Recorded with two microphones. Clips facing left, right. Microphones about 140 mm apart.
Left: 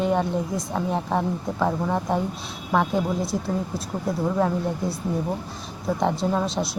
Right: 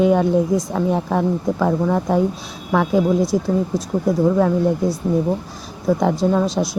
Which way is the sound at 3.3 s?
90° right.